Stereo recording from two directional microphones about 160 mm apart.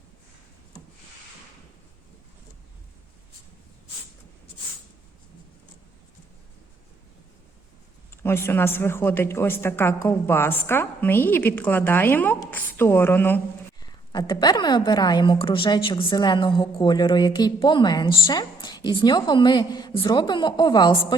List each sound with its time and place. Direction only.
8.2 s a woman's voice: 15° left (ahead or behind)
13.8 s a woman's voice: 25° left (ahead or behind)